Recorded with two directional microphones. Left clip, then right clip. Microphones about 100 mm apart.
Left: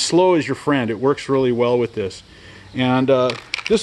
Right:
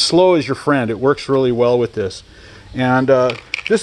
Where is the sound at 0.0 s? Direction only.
15° right (ahead or behind).